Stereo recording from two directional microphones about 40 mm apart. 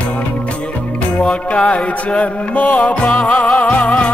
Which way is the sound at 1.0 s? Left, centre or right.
Left.